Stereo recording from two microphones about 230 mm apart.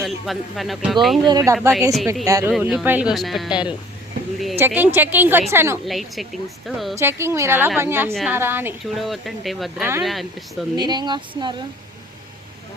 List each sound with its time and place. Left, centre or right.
0.0 s speech: centre
1.2 s a woman's voice: centre
5.8 s speech: centre
6.9 s a woman's voice: centre
10.8 s speech: centre